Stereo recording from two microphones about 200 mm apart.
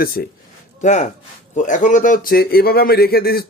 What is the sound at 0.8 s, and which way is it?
Speech, 35° left (ahead or behind).